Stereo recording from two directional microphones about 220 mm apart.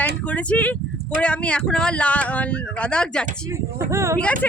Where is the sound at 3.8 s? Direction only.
15° right (ahead or behind).